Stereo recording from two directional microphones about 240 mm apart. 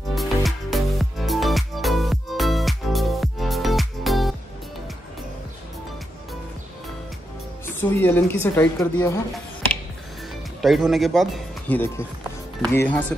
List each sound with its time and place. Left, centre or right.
0.1 s music: centre
7.8 s a woman's voice: centre
10.6 s a woman's voice: centre